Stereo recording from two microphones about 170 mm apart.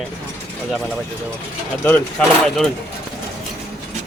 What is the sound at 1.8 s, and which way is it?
Speech, 10° left (ahead or behind).